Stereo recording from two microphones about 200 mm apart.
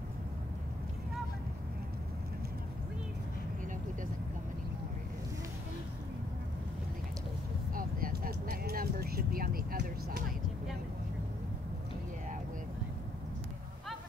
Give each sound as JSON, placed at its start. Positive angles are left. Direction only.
{"t": 7.7, "sound": "vehicle", "side_deg": -45}